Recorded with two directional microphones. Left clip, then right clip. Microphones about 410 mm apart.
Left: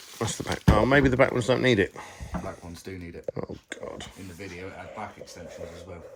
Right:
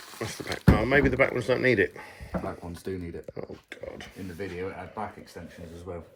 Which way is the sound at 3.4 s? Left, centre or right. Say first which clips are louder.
Left 3 dB; centre.